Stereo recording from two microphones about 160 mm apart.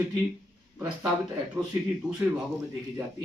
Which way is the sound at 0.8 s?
5° right (ahead or behind).